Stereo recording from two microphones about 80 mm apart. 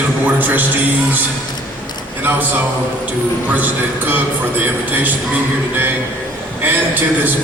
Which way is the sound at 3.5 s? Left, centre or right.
Right.